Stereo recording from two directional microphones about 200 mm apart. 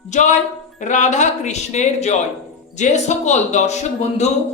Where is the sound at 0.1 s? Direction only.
35° left (ahead or behind).